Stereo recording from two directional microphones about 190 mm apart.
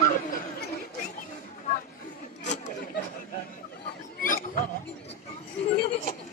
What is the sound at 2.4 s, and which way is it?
Chatter, 40° left (ahead or behind).